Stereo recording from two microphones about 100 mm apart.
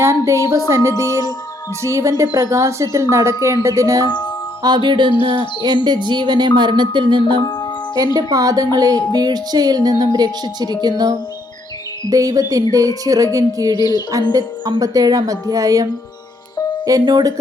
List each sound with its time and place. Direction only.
0.0 s speech: 30° right (ahead or behind)
3.4 s music: 30° right (ahead or behind)
4.6 s speech: 50° right (ahead or behind)
7.9 s music: 40° right (ahead or behind)
13.7 s music: 45° left (ahead or behind)
14.3 s music: 40° right (ahead or behind)